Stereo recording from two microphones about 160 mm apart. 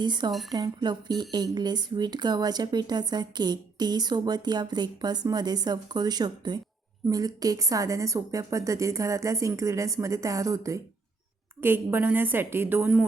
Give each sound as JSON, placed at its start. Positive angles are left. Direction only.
{"t": 0.0, "sound": "a woman's voice", "side_deg": -30}